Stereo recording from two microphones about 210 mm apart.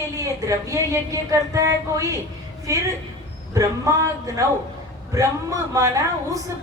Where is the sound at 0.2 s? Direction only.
15° right (ahead or behind).